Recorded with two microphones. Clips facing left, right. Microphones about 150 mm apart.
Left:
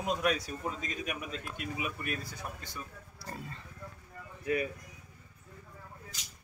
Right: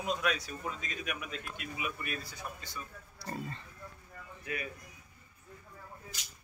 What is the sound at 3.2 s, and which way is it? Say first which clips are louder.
Speech: right 4 dB; 5° left (ahead or behind).